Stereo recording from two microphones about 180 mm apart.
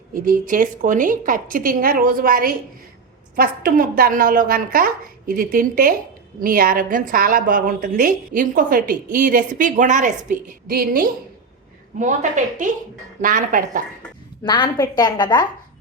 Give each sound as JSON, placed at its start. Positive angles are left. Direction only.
{"t": 0.1, "sound": "a woman's voice", "side_deg": -50}
{"t": 11.9, "sound": "a woman's voice", "side_deg": -45}
{"t": 14.4, "sound": "a woman's voice", "side_deg": 25}